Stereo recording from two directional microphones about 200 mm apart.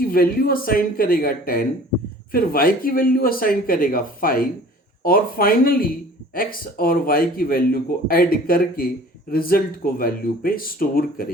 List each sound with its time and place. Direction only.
0.0 s speech: 45° left (ahead or behind)